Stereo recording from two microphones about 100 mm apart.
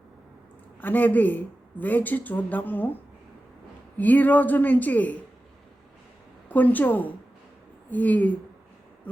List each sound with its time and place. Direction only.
0.8 s a woman's voice: 15° left (ahead or behind)
3.9 s a woman's voice: 15° left (ahead or behind)
6.5 s a woman's voice: 15° left (ahead or behind)